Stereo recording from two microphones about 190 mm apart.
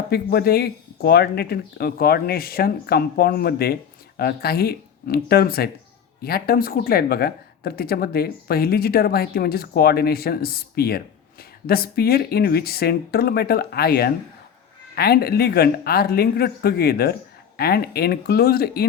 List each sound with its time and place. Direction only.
0.1 s speech: 55° left (ahead or behind)